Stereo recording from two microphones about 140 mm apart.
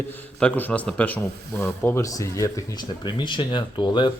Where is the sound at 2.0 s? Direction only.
25° left (ahead or behind).